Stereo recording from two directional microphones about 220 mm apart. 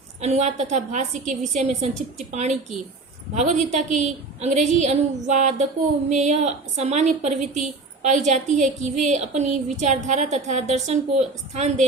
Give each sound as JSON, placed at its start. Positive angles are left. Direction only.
{"t": 0.2, "sound": "a woman's voice", "side_deg": -30}